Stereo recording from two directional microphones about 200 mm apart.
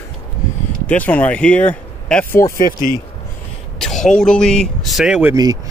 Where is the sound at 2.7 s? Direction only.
45° left (ahead or behind).